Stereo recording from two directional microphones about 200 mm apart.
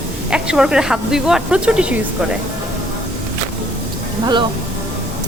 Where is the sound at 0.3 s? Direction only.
5° right (ahead or behind).